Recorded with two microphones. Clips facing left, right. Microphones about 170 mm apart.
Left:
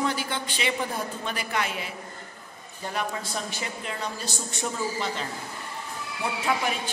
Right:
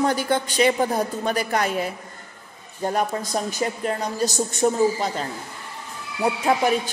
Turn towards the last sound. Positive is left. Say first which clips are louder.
# right 7 dB
turn(degrees=-40)  # may be behind; listen again after turning